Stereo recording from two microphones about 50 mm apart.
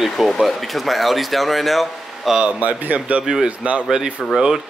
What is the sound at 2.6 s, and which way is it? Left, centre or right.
A man's voice, right.